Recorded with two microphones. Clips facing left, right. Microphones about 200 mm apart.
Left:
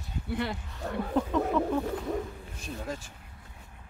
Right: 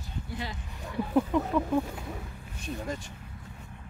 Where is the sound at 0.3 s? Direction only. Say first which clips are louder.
Left 8 dB; 60° left (ahead or behind).